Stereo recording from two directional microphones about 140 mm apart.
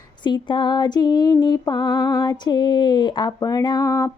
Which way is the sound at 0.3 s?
35° left (ahead or behind).